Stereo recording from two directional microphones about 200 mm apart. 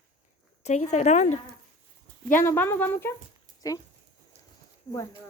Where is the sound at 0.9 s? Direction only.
35° left (ahead or behind).